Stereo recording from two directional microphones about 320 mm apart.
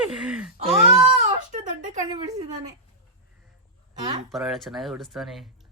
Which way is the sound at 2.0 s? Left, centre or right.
Centre.